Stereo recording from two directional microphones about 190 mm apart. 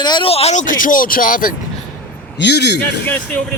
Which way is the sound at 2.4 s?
60° left (ahead or behind).